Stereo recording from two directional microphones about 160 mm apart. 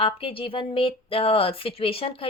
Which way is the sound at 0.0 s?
35° left (ahead or behind).